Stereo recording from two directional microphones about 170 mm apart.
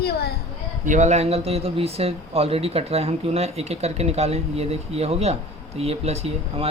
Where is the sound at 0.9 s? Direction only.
45° right (ahead or behind).